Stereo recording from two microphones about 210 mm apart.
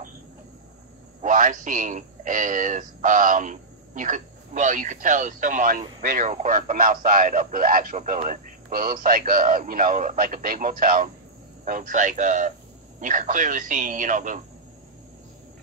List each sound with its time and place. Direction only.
1.2 s a man's voice: 40° right (ahead or behind)